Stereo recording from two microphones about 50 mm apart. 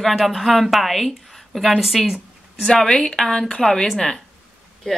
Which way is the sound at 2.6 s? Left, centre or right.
Centre.